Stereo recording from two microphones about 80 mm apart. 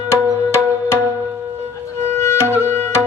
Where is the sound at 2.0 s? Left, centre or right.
Left.